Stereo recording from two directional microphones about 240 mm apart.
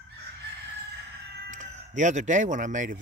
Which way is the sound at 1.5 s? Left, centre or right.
Right.